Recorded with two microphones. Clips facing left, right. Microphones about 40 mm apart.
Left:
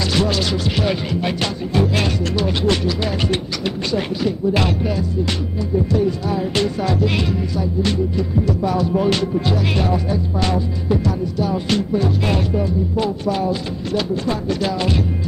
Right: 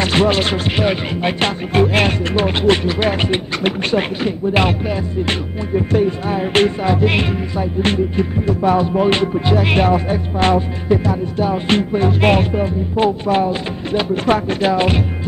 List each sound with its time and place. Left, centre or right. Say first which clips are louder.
0.0 s music: right 4 dB; right
5.8 s music: right 2 dB; right
14.1 s speech: right 5 dB; right
14.6 s music: right 5 dB; right